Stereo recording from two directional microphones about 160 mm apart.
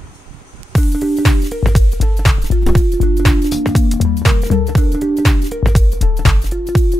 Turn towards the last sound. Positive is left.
turn(degrees=0)  # may be behind; listen again after turning